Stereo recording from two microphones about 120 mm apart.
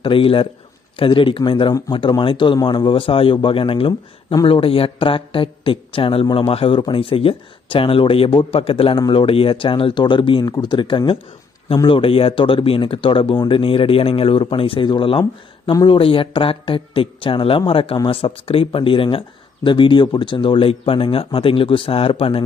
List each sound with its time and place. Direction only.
0.0 s speech: 50° left (ahead or behind)
15.7 s speech: 35° left (ahead or behind)
16.0 s speech: 50° left (ahead or behind)